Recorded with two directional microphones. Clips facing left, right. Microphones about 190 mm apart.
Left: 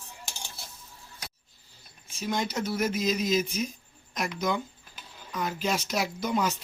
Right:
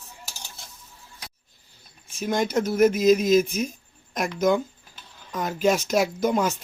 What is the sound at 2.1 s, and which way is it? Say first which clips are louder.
Speech: right 6 dB; 50° right (ahead or behind).